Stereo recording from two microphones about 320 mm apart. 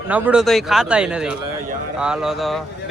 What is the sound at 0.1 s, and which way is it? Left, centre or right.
Speech, centre.